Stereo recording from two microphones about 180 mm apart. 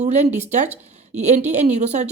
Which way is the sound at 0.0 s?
40° right (ahead or behind).